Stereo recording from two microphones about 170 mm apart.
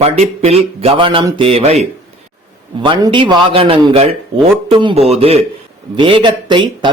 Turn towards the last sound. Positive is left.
turn(degrees=-30)  # may be behind; listen again after turning